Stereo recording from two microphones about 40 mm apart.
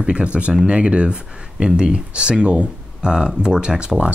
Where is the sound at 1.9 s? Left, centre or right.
Right.